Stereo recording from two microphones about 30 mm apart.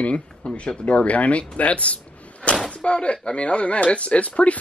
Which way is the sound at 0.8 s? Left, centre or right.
Left.